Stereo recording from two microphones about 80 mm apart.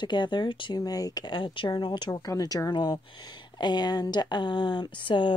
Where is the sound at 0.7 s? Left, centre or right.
Left.